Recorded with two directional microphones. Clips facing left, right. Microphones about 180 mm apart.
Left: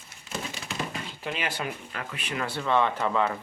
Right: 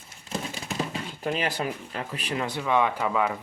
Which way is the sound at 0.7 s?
40° right (ahead or behind).